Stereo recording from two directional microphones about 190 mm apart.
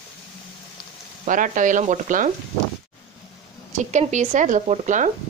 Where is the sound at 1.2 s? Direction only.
45° right (ahead or behind).